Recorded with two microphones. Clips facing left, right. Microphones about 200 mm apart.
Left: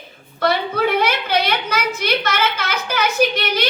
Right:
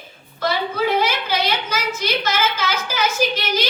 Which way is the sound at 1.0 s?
60° left (ahead or behind).